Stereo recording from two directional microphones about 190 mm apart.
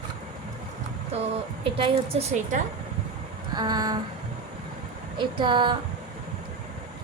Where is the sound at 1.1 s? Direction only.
35° right (ahead or behind).